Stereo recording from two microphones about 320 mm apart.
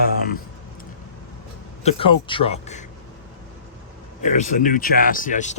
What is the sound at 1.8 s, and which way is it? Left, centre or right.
Speech, centre.